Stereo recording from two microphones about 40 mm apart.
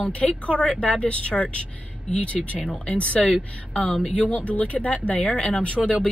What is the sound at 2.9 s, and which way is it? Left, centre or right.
Speech, left.